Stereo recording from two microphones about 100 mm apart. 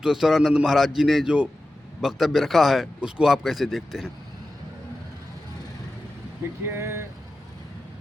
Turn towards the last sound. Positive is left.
turn(degrees=-25)  # may be behind; listen again after turning